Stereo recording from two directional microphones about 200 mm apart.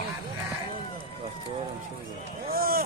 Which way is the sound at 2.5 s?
50° right (ahead or behind).